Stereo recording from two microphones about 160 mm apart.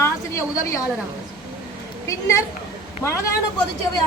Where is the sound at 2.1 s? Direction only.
20° left (ahead or behind).